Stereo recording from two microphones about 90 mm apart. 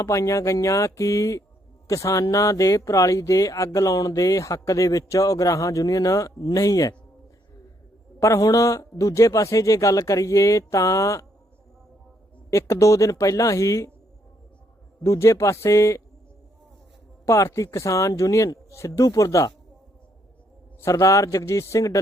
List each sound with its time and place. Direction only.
0.0 s speech: 35° left (ahead or behind)
8.2 s speech: 35° left (ahead or behind)
12.5 s speech: 35° left (ahead or behind)
15.0 s speech: 35° left (ahead or behind)
17.2 s speech: 35° left (ahead or behind)
20.8 s speech: 35° left (ahead or behind)